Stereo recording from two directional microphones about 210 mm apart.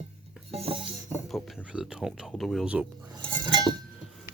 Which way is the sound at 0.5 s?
25° right (ahead or behind).